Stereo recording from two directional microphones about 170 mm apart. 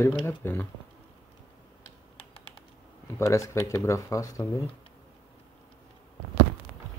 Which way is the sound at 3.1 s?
15° left (ahead or behind).